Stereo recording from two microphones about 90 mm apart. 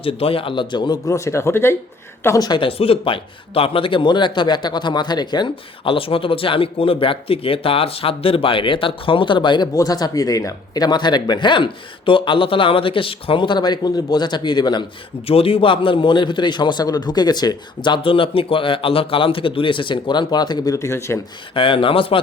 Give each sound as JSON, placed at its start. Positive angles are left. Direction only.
{"t": 0.0, "sound": "a man's voice", "side_deg": 90}
{"t": 1.0, "sound": "speech", "side_deg": 35}
{"t": 2.6, "sound": "speech", "side_deg": 90}
{"t": 5.9, "sound": "speech", "side_deg": 80}
{"t": 9.7, "sound": "speech", "side_deg": 45}
{"t": 15.3, "sound": "a man's voice", "side_deg": 90}
{"t": 20.7, "sound": "speech", "side_deg": 30}
{"t": 21.5, "sound": "speech", "side_deg": 75}